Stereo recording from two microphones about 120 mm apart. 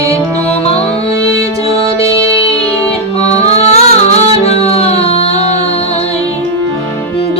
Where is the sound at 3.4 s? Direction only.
65° left (ahead or behind).